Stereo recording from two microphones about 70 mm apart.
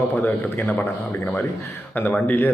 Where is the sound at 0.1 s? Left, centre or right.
Left.